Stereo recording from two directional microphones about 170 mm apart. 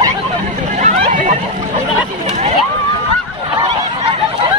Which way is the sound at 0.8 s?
50° right (ahead or behind).